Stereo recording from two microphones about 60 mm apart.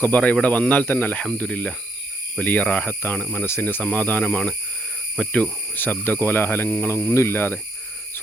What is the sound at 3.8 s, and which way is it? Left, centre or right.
Speech, left.